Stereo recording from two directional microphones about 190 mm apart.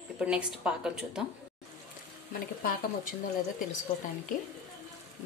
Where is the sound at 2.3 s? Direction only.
45° left (ahead or behind).